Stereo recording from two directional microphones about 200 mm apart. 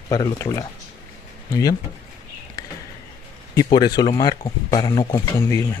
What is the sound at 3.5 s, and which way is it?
Speech, 20° left (ahead or behind).